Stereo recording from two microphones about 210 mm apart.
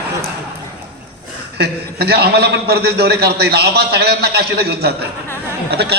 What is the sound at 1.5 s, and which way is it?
A man's voice, 50° right (ahead or behind).